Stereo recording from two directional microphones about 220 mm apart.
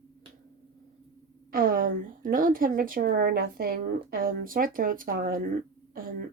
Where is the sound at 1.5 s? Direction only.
40° right (ahead or behind).